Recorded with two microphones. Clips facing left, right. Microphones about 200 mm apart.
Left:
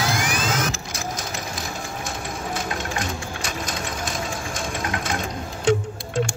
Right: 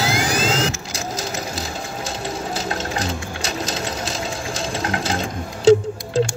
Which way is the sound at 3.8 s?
30° right (ahead or behind).